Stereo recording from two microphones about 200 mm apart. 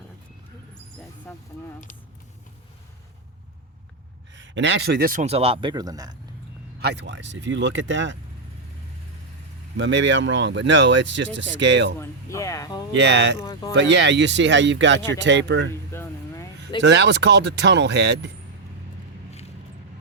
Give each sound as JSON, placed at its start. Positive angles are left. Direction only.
{"t": 1.3, "sound": "speech", "side_deg": 10}
{"t": 4.4, "sound": "speech", "side_deg": -65}
{"t": 6.7, "sound": "speech", "side_deg": -55}
{"t": 9.7, "sound": "speech", "side_deg": -65}
{"t": 11.9, "sound": "speech", "side_deg": 15}
{"t": 13.0, "sound": "speech", "side_deg": -60}
{"t": 13.4, "sound": "speech", "side_deg": 20}
{"t": 13.7, "sound": "speech", "side_deg": -60}
{"t": 15.9, "sound": "a sound", "side_deg": 15}
{"t": 16.8, "sound": "speech", "side_deg": -60}